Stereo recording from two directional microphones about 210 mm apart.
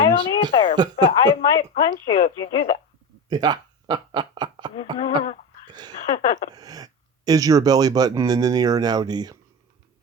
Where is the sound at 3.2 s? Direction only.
20° right (ahead or behind).